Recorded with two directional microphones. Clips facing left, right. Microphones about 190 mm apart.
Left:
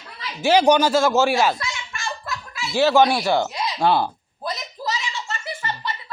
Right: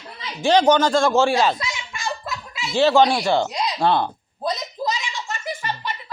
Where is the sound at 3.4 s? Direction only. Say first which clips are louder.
Right 2 dB; 15° right (ahead or behind).